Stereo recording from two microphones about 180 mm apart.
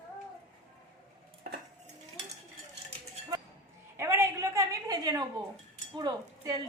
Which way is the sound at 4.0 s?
15° right (ahead or behind).